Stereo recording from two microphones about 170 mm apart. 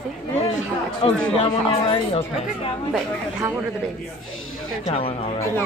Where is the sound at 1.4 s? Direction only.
30° left (ahead or behind).